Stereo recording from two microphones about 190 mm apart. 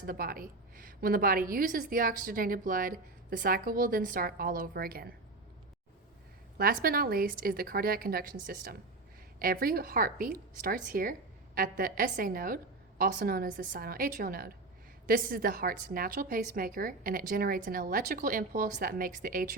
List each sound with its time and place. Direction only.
0.0 s a woman's voice: 50° right (ahead or behind)
6.6 s a woman's voice: 50° right (ahead or behind)